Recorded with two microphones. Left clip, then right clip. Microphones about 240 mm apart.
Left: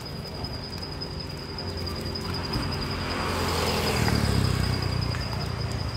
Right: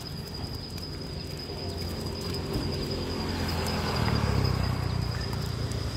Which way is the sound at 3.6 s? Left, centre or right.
Left.